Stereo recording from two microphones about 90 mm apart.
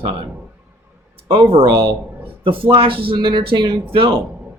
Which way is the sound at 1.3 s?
85° right.